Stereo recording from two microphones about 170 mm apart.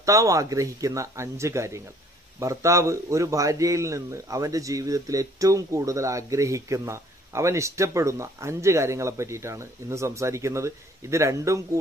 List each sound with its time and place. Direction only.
0.0 s a man's voice: 20° right (ahead or behind)